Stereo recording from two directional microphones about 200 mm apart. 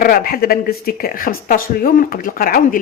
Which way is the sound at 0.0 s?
45° left (ahead or behind).